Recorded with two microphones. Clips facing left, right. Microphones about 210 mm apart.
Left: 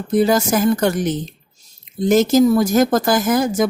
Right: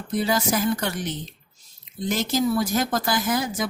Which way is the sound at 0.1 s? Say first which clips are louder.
Left 8 dB; 45° left (ahead or behind).